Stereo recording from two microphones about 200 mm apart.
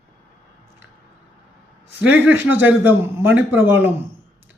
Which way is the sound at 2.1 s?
10° right (ahead or behind).